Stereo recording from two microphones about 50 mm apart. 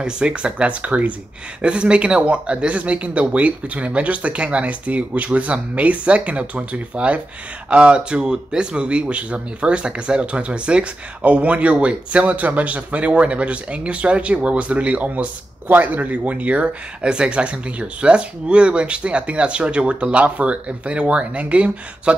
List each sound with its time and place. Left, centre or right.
0.0 s speech: right